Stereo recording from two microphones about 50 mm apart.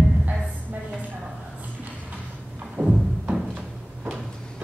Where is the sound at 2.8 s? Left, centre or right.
Right.